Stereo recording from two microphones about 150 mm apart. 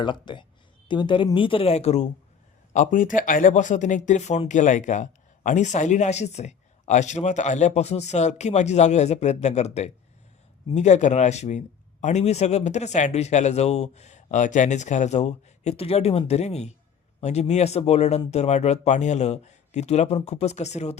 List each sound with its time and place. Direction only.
0.0 s a woman's voice: 30° left (ahead or behind)
2.7 s a man's voice: 60° left (ahead or behind)